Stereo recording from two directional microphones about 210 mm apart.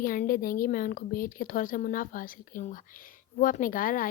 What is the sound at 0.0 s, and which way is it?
A woman's voice, 40° left (ahead or behind).